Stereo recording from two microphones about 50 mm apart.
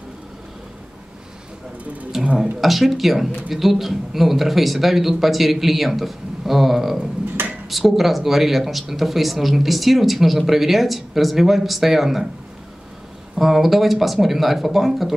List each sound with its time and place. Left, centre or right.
2.1 s speech: centre
7.4 s a sound: right
7.7 s speech: centre
13.4 s speech: centre